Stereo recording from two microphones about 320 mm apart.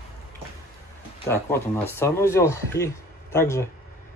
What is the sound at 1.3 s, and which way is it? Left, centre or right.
Speech, centre.